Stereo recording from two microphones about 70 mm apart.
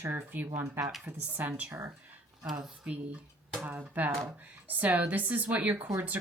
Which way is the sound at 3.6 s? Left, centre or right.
Right.